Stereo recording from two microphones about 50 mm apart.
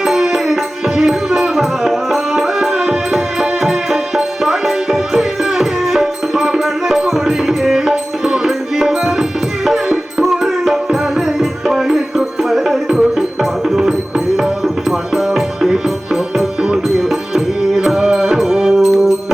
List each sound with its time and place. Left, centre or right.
0.0 s music: centre
18.8 s music: centre